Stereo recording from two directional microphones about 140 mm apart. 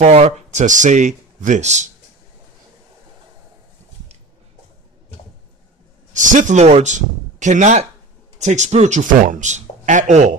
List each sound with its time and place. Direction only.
0.0 s speech: 50° right (ahead or behind)
6.1 s speech: 65° right (ahead or behind)